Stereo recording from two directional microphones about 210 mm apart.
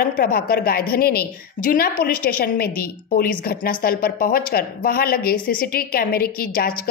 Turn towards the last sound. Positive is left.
turn(degrees=45)  # may be behind; listen again after turning